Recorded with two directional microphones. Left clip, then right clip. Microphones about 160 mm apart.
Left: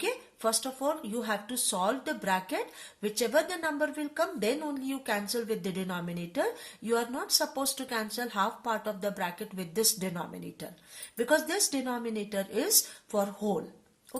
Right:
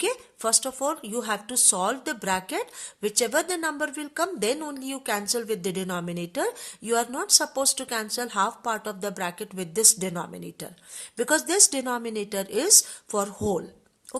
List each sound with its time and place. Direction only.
0.0 s speech: 50° right (ahead or behind)